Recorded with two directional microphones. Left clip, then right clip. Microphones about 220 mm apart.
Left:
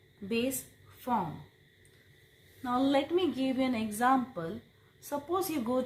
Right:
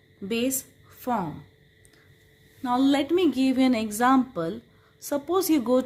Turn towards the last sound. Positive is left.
turn(degrees=-45)  # may be behind; listen again after turning